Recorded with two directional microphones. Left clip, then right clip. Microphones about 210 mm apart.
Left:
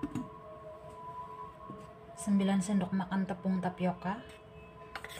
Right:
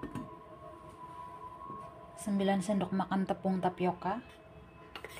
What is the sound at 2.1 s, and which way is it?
Speech, 20° right (ahead or behind).